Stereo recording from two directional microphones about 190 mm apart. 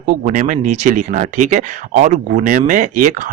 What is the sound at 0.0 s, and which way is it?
Speech, 45° right (ahead or behind).